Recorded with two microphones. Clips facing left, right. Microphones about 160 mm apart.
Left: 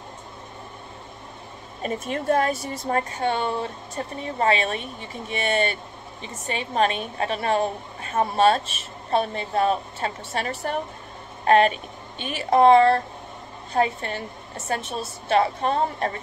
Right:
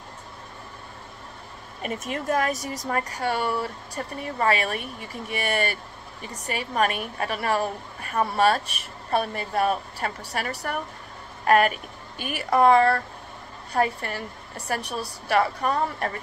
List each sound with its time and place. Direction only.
1.8 s a woman's voice: 30° left (ahead or behind)